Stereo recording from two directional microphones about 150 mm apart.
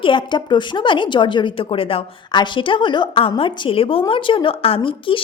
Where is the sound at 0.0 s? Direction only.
35° left (ahead or behind).